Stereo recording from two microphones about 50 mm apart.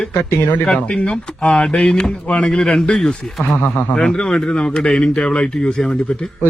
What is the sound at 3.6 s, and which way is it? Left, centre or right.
Speech, left.